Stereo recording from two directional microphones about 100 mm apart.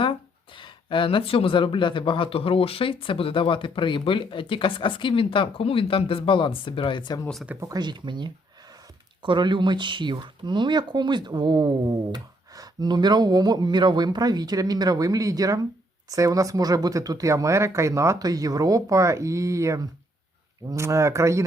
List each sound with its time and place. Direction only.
0.0 s speech: 60° left (ahead or behind)
7.8 s speech: 50° right (ahead or behind); by 21.4 s 30° right (ahead or behind)